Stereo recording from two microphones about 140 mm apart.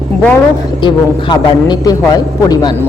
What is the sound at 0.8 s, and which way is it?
A man's voice, 30° left (ahead or behind).